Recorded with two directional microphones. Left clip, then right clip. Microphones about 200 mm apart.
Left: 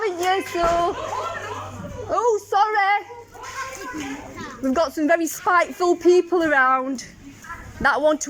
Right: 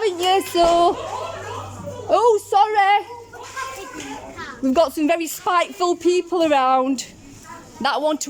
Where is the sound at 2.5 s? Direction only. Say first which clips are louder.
Right 3 dB; 20° right (ahead or behind).